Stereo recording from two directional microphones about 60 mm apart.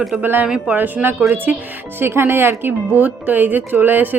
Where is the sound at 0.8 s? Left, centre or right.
Right.